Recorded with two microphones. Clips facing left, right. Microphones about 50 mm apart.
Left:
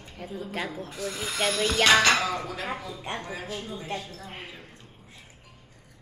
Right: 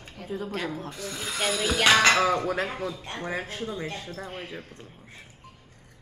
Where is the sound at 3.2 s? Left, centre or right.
Right.